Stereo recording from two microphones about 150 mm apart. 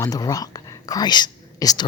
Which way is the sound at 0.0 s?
25° left (ahead or behind).